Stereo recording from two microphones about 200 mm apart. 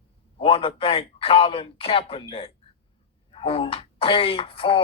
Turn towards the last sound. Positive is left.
turn(degrees=25)  # may be behind; listen again after turning